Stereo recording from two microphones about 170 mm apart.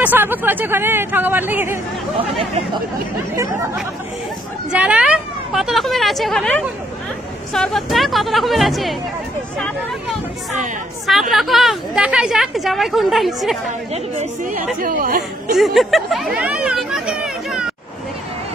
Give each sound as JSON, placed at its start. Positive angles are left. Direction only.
{"t": 0.0, "sound": "speech", "side_deg": -10}
{"t": 2.1, "sound": "speech", "side_deg": -35}
{"t": 4.6, "sound": "a woman's voice", "side_deg": -5}
{"t": 11.1, "sound": "a woman's voice", "side_deg": 0}
{"t": 14.1, "sound": "a woman's voice", "side_deg": -50}
{"t": 15.5, "sound": "a woman's voice", "side_deg": 0}